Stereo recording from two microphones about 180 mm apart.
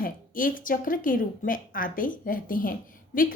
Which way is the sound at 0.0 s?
50° left (ahead or behind).